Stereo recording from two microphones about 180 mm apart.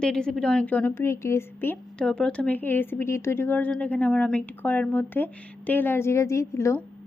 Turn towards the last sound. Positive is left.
turn(degrees=15)  # may be behind; listen again after turning